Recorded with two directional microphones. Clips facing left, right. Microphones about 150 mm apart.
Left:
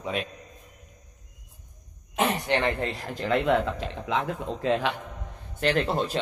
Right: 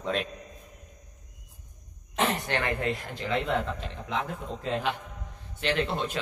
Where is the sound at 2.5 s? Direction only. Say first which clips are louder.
Left 4 dB; 20° left (ahead or behind).